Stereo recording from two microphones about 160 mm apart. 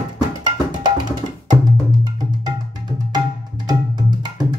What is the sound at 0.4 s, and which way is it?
Music, 25° right (ahead or behind).